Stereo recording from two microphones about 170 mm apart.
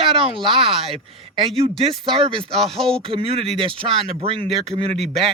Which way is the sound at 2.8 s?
35° right (ahead or behind).